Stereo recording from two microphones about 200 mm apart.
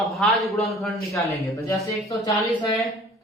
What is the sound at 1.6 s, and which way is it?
Speech, 15° left (ahead or behind).